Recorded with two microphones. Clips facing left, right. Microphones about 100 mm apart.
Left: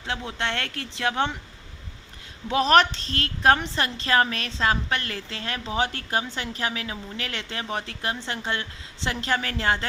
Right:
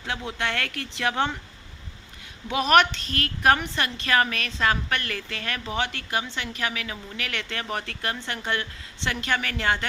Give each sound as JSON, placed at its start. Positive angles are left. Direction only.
{"t": 0.3, "sound": "a woman's voice", "side_deg": 25}
{"t": 2.5, "sound": "a woman's voice", "side_deg": 30}